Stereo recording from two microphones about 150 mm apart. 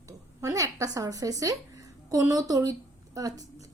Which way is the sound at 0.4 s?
20° right (ahead or behind).